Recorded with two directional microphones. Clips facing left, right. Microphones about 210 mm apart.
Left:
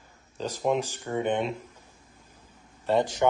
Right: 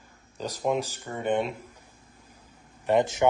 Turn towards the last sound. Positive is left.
turn(degrees=-20)  # may be behind; listen again after turning